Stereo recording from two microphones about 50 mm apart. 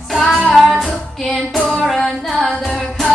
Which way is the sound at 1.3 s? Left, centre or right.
Centre.